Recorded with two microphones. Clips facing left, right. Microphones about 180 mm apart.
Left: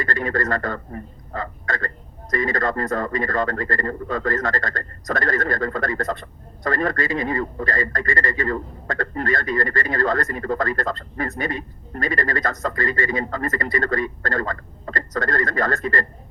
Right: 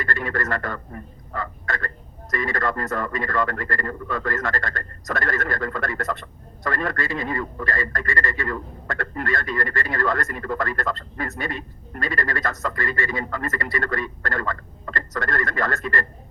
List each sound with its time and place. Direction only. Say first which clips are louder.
0.0 s speech: left 3 dB; 20° left (ahead or behind)